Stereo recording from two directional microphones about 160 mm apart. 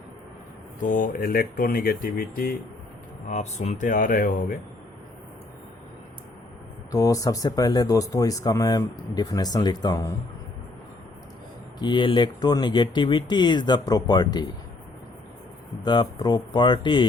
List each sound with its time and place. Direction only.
0.8 s speech: 55° left (ahead or behind)
3.2 s speech: 45° left (ahead or behind)
6.9 s speech: 20° left (ahead or behind)
11.8 s speech: 30° left (ahead or behind)
15.8 s speech: 30° left (ahead or behind)